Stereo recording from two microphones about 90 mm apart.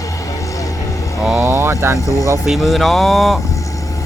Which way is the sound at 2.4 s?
Centre (ahead or behind).